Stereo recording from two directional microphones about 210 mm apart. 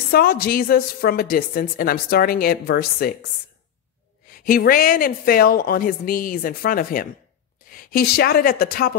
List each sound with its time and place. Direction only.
0.1 s a woman's voice: 45° left (ahead or behind)
4.3 s a woman's voice: 45° left (ahead or behind)